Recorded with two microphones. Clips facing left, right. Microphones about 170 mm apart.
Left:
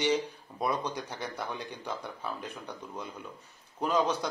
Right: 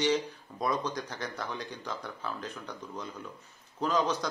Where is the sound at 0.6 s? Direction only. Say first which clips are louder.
Even; 10° left (ahead or behind).